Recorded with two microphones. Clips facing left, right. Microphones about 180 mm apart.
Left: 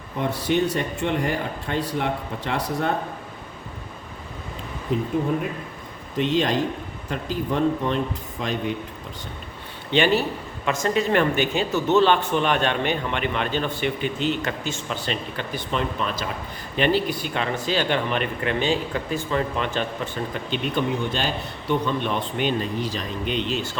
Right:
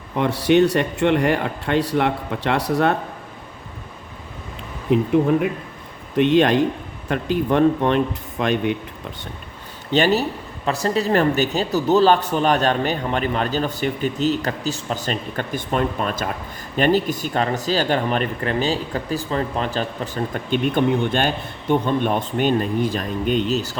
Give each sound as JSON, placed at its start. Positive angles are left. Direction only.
{"t": 0.2, "sound": "a man's voice", "side_deg": -70}
{"t": 4.9, "sound": "a man's voice", "side_deg": -65}
{"t": 6.1, "sound": "speech", "side_deg": -65}
{"t": 9.9, "sound": "speech", "side_deg": -40}